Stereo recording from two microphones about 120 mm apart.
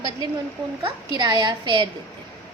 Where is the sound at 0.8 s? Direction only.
40° right (ahead or behind).